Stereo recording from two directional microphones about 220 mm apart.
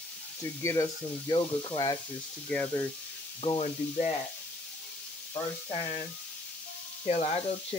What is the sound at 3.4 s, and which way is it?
Speech, 30° left (ahead or behind).